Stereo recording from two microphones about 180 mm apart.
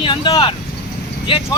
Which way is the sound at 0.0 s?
25° left (ahead or behind).